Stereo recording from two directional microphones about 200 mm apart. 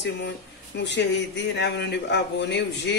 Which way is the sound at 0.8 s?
60° left (ahead or behind).